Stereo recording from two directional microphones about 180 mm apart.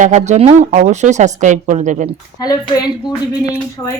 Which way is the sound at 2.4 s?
20° left (ahead or behind).